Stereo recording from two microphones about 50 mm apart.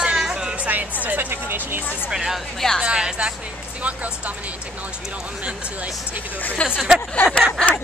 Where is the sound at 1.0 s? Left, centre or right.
Right.